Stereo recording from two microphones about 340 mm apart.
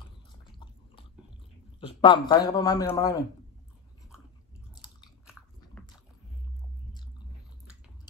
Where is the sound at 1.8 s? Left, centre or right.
Centre.